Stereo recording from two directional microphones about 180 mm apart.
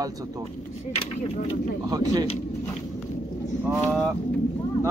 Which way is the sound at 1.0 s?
35° left (ahead or behind).